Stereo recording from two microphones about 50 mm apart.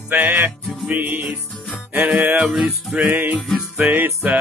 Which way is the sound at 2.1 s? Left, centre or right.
Right.